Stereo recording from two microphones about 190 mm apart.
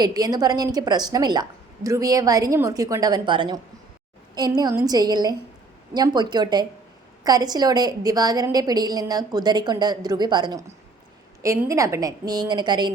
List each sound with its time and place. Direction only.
0.0 s a woman's voice: 20° right (ahead or behind)